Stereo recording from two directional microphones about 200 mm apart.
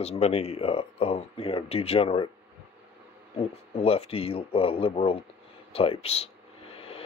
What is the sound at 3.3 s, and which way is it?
Speech, 30° left (ahead or behind).